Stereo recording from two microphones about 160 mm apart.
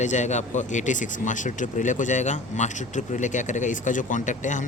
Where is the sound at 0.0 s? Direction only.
50° left (ahead or behind).